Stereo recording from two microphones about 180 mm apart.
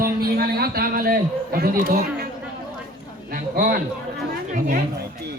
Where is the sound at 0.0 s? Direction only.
55° right (ahead or behind).